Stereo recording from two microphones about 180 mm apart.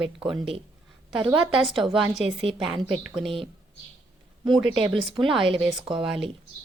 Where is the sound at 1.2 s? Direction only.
5° right (ahead or behind).